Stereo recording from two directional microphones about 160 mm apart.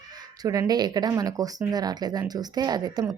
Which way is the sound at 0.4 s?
20° right (ahead or behind).